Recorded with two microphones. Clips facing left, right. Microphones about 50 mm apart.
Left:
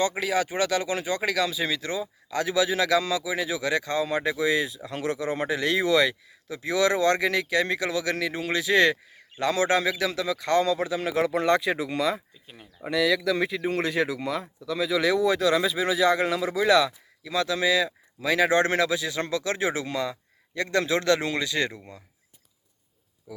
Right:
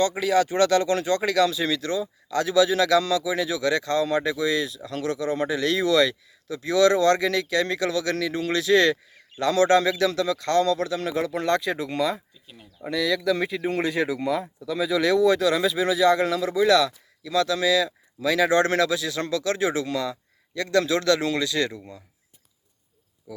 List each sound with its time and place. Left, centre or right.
0.0 s speech: centre